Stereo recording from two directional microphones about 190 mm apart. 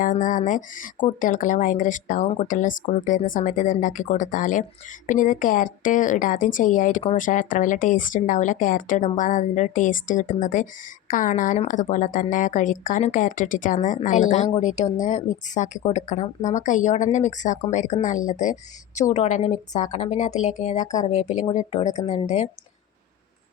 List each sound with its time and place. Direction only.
0.0 s a woman's voice: 45° left (ahead or behind)